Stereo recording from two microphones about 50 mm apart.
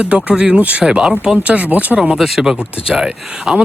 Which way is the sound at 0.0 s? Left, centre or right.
Right.